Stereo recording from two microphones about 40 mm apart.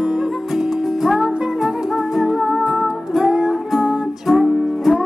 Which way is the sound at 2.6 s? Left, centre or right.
Right.